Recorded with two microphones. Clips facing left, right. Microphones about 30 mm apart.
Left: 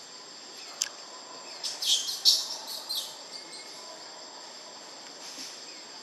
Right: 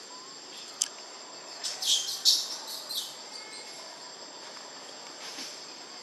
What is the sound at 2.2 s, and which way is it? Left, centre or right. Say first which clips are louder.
Bird: left 1 dB; left.